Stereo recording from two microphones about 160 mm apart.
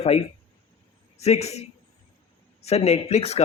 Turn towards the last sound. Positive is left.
turn(degrees=40)  # may be behind; listen again after turning